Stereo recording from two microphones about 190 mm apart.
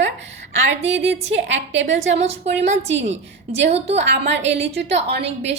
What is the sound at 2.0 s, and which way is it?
A woman's voice, 35° right (ahead or behind).